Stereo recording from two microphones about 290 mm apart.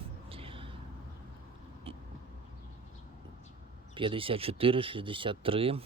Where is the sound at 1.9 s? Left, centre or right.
Right.